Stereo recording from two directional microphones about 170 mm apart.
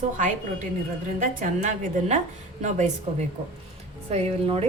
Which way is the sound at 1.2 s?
50° right (ahead or behind).